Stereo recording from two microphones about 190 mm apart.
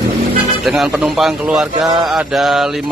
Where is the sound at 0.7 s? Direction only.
Centre (ahead or behind).